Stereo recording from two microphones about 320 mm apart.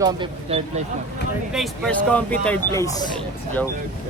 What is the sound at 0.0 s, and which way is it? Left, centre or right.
Speech, centre.